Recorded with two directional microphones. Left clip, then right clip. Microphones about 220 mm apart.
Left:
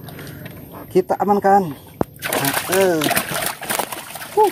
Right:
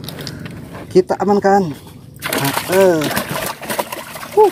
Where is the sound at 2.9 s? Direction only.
30° left (ahead or behind).